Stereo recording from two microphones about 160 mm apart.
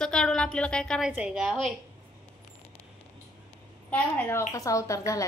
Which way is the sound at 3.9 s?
10° left (ahead or behind).